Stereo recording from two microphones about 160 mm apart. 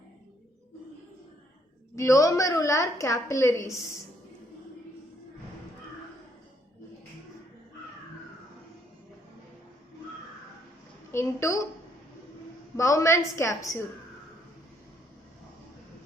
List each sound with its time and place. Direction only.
2.0 s a woman's voice: 20° left (ahead or behind)
11.1 s a woman's voice: 15° left (ahead or behind)
12.7 s a woman's voice: 20° left (ahead or behind)